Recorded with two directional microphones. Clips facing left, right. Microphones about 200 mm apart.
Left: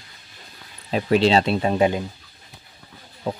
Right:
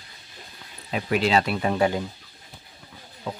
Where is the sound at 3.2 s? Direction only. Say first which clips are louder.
Left 6 dB; 40° left (ahead or behind).